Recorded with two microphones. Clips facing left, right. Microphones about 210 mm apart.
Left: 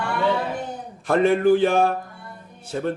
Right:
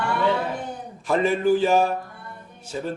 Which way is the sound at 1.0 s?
60° left (ahead or behind).